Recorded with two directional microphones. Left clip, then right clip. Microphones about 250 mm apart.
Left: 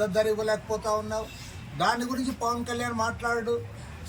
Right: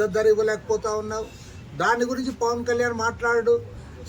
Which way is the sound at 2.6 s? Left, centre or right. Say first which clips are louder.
Right 6 dB; centre.